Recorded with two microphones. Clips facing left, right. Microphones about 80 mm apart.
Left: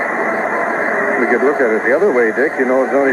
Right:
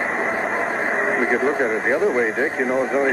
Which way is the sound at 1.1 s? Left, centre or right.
Left.